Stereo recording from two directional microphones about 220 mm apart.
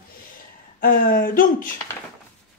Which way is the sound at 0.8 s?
40° left (ahead or behind).